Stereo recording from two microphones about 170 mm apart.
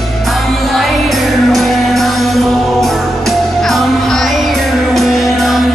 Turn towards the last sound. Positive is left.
turn(degrees=0)  # may be behind; listen again after turning